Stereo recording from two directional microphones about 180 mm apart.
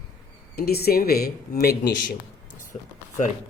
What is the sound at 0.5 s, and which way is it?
Speech, 60° left (ahead or behind).